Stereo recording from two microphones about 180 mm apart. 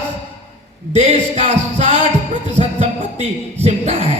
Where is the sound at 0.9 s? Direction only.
40° right (ahead or behind).